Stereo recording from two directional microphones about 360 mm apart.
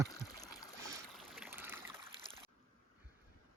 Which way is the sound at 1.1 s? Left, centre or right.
Centre.